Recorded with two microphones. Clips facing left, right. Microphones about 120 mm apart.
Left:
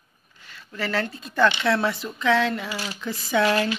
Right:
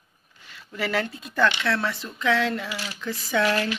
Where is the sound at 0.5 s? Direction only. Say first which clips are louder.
Even; 10° right (ahead or behind).